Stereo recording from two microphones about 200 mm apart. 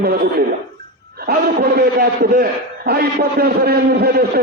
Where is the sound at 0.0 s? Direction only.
50° right (ahead or behind).